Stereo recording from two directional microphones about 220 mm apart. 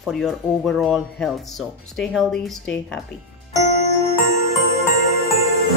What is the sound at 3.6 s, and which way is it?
Music, 30° left (ahead or behind).